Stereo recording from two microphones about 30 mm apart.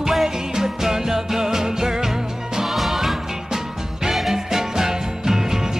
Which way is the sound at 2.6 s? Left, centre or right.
Centre.